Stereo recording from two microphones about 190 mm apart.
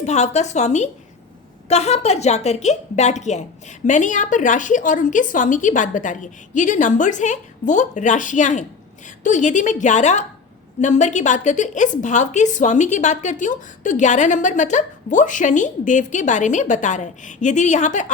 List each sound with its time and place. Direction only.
0.0 s a woman's voice: 35° left (ahead or behind)